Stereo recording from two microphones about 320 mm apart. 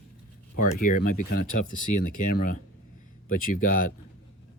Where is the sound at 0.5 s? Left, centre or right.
Left.